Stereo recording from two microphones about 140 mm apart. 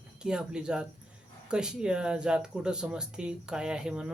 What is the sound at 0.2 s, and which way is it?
Speech, 5° right (ahead or behind).